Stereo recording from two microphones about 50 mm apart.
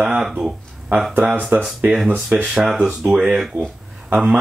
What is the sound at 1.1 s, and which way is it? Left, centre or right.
Speech, right.